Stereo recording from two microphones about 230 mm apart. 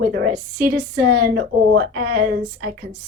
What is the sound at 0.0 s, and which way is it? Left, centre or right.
A woman's voice, right.